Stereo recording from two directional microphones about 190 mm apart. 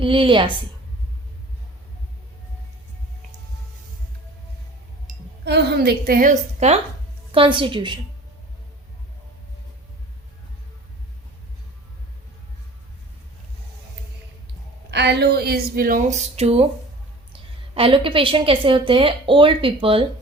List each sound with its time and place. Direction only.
0.0 s a woman's voice: 25° right (ahead or behind)
5.1 s a sound: 45° right (ahead or behind)
5.5 s a woman's voice: 60° right (ahead or behind); by 6.7 s 40° right (ahead or behind)
7.3 s a woman's voice: 25° right (ahead or behind)
14.8 s a woman's voice: 60° right (ahead or behind); by 20.1 s 30° right (ahead or behind)